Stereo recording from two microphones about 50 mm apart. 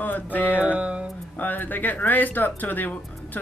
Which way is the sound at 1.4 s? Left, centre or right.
Left.